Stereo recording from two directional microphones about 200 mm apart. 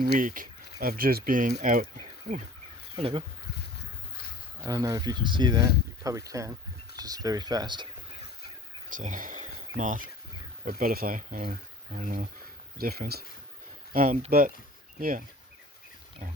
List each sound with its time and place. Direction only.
0.0 s speech: 40° right (ahead or behind)
2.9 s speech: 25° right (ahead or behind)
4.6 s speech: 20° right (ahead or behind)
8.9 s speech: 40° right (ahead or behind)